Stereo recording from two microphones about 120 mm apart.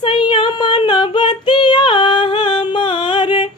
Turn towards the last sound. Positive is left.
turn(degrees=40)  # may be behind; listen again after turning